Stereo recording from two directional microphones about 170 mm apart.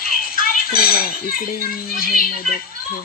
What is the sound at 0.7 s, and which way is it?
A child's voice, 60° left (ahead or behind).